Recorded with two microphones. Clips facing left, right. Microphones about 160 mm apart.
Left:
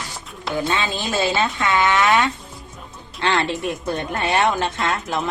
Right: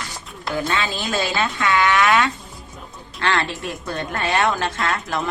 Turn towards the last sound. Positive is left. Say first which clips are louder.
# left 1 dB
turn(degrees=20)  # may be behind; listen again after turning